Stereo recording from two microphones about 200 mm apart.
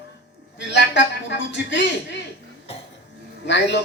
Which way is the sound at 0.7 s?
65° left (ahead or behind).